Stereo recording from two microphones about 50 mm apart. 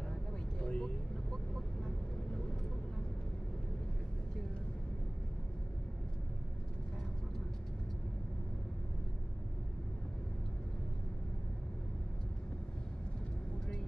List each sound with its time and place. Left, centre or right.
0.6 s vehicle: centre